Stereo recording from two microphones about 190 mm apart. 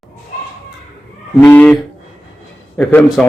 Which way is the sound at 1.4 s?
10° left (ahead or behind).